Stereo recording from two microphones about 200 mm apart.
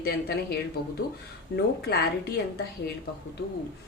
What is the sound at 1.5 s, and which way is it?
Speech, 55° left (ahead or behind).